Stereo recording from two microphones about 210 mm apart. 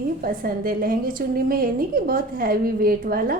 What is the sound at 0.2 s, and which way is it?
A woman's voice, 45° right (ahead or behind).